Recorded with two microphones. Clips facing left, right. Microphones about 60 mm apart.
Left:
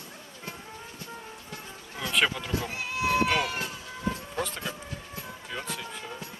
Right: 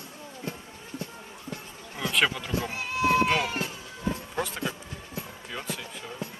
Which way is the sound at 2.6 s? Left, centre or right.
Right.